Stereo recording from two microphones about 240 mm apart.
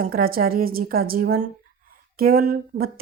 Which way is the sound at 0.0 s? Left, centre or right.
Right.